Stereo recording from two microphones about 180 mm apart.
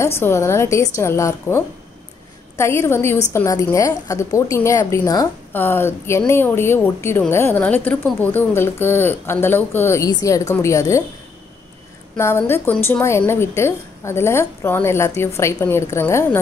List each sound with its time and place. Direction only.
0.2 s a woman's voice: 15° left (ahead or behind)
12.2 s a woman's voice: 15° left (ahead or behind)